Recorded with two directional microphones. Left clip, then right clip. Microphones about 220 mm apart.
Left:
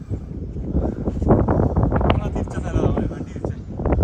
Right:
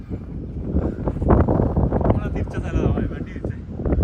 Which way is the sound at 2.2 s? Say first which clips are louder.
Left 1 dB; 35° left (ahead or behind).